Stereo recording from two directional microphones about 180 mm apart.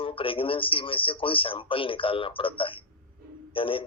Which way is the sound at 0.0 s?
30° left (ahead or behind).